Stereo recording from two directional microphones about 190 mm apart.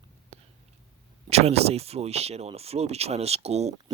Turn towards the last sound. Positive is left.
turn(degrees=-35)  # may be behind; listen again after turning